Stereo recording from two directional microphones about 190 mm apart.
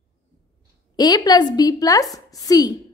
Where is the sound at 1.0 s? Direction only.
20° left (ahead or behind).